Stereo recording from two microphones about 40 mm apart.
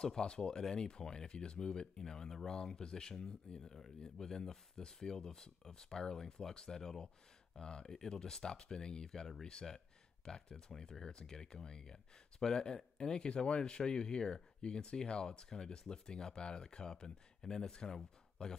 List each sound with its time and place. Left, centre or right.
0.0 s speech: centre